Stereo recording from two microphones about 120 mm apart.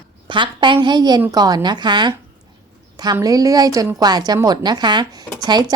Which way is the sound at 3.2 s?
30° right (ahead or behind).